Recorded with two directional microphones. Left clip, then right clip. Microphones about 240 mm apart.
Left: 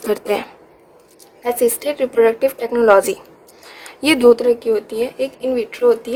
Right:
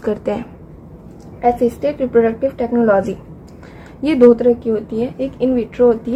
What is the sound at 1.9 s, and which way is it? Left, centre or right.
A woman's voice, left.